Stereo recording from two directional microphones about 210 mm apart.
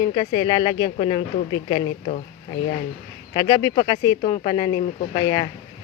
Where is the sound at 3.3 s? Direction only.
20° left (ahead or behind).